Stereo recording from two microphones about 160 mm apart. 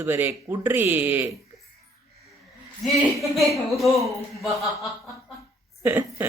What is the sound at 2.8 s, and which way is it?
Speech, centre (ahead or behind).